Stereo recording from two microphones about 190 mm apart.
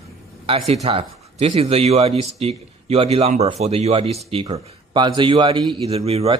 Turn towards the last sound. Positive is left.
turn(degrees=-30)  # may be behind; listen again after turning